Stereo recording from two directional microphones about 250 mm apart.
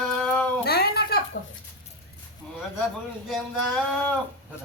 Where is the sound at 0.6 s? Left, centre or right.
Left.